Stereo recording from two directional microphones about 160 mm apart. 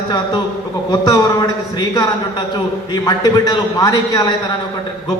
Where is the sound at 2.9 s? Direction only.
25° left (ahead or behind).